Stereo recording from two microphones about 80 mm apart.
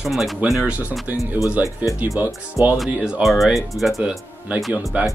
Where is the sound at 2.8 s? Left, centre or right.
Centre.